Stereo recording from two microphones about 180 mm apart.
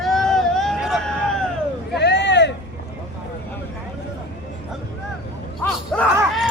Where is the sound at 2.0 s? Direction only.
70° left (ahead or behind).